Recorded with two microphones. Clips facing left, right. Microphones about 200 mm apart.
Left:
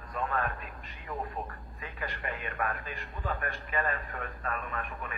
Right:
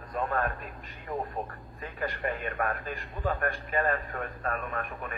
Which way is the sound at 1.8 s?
45° right (ahead or behind).